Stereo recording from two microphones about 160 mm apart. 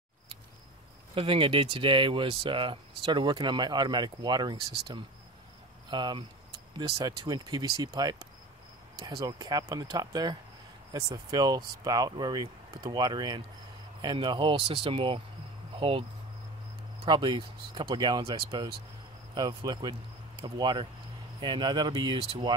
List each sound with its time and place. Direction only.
1.1 s speech: 35° right (ahead or behind)